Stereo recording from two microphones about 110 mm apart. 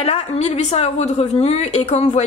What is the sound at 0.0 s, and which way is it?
A woman's voice, 75° left (ahead or behind).